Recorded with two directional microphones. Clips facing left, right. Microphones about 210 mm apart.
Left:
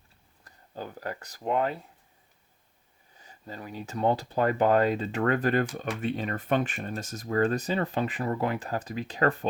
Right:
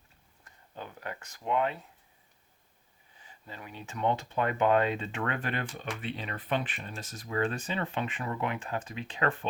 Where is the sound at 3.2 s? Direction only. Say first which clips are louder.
Left 5 dB; 40° left (ahead or behind).